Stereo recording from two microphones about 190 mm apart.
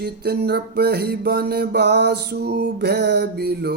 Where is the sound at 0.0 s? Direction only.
60° right (ahead or behind).